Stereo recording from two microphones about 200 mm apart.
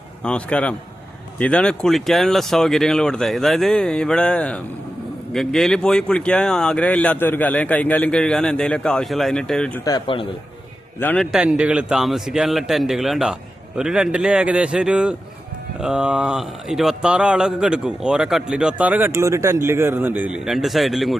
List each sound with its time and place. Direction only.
0.2 s a man's voice: 5° left (ahead or behind)
9.9 s a man's voice: 25° left (ahead or behind)
11.0 s speech: 5° left (ahead or behind)